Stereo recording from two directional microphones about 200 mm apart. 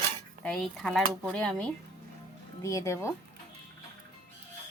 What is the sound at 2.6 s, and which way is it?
Speech, 15° left (ahead or behind).